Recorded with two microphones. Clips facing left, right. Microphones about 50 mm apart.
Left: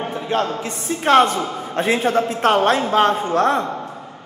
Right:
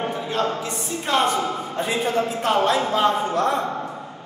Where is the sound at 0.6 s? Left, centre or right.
Left.